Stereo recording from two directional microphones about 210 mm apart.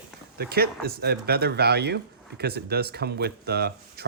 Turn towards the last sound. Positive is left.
turn(degrees=-50)  # may be behind; listen again after turning